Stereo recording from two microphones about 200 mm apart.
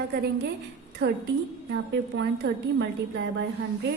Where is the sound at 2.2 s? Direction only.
70° right (ahead or behind).